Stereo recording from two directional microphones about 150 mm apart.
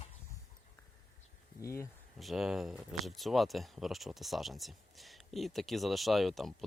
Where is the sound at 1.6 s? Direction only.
20° left (ahead or behind).